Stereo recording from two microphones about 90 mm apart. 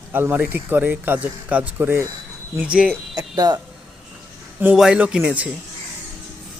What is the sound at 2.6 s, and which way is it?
Speech, 10° right (ahead or behind).